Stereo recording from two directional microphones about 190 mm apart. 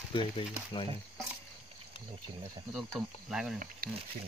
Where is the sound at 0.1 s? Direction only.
25° left (ahead or behind).